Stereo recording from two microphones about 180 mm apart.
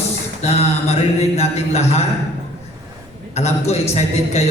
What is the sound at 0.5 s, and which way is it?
Mantra, 35° left (ahead or behind).